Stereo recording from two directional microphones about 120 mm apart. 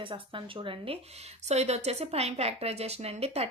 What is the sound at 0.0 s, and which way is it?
Speech, 45° right (ahead or behind).